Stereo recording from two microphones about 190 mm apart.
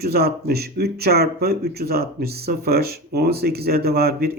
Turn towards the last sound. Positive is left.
turn(degrees=-55)  # may be behind; listen again after turning